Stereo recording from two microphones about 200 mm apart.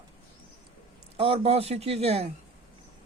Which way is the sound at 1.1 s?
30° right (ahead or behind).